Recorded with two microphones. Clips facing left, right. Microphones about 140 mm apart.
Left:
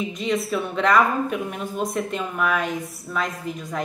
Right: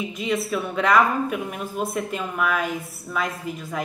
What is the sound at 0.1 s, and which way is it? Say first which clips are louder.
A woman's voice: left 1 dB; 5° right (ahead or behind).